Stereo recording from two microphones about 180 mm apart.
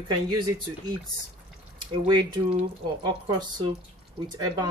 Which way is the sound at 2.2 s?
30° right (ahead or behind).